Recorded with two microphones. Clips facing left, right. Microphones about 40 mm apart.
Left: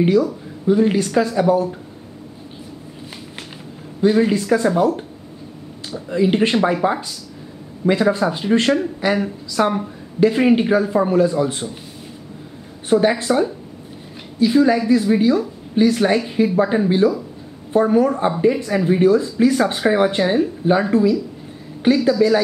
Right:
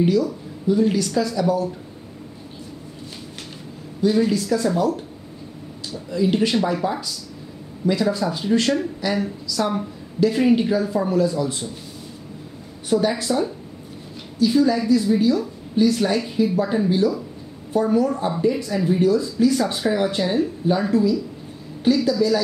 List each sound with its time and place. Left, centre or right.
0.0 s speech: left
4.0 s speech: left
6.0 s speech: left
12.8 s speech: left
14.4 s speech: left
21.8 s speech: left